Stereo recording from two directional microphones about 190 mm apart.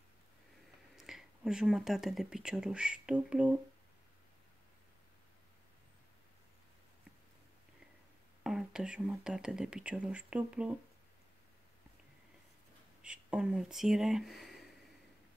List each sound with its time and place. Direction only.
0.9 s speech: centre (ahead or behind)
8.5 s speech: 5° right (ahead or behind)
13.0 s speech: 5° right (ahead or behind)